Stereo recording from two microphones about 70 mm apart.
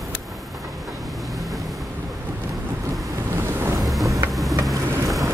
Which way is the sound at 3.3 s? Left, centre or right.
Right.